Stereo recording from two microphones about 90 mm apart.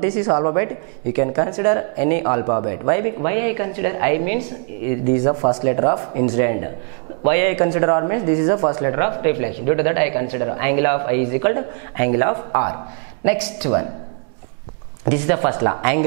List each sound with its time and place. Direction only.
0.0 s speech: 15° right (ahead or behind)
15.0 s speech: 10° right (ahead or behind)